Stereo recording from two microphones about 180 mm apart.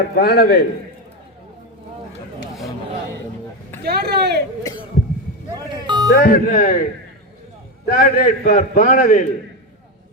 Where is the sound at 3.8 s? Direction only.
65° right (ahead or behind).